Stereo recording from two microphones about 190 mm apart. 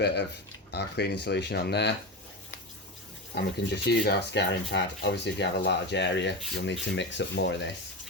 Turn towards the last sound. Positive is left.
turn(degrees=65)  # may be behind; listen again after turning